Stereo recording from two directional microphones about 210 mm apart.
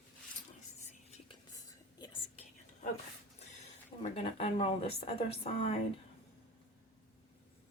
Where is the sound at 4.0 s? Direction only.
30° left (ahead or behind).